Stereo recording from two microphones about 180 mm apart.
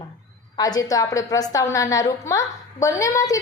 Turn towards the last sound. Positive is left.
turn(degrees=20)  # may be behind; listen again after turning